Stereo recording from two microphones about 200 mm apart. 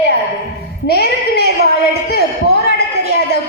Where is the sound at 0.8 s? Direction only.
55° left (ahead or behind).